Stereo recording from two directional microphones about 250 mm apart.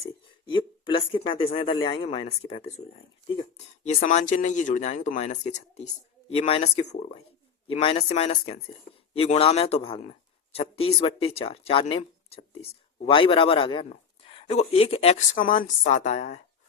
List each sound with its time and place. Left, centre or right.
0.5 s a man's voice: centre
3.8 s a man's voice: left